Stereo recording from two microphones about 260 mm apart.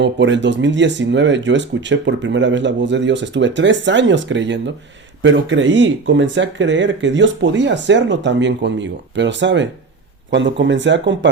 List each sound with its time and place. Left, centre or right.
0.0 s speech: right